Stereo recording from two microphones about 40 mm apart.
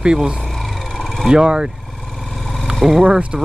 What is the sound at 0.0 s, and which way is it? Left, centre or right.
Speech, centre.